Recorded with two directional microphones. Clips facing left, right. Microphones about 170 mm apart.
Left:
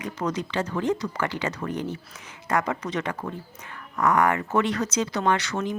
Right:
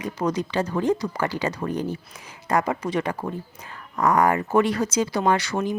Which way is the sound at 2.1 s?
30° right (ahead or behind).